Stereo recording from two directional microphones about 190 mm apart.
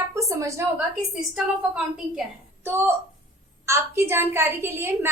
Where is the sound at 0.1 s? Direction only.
15° right (ahead or behind).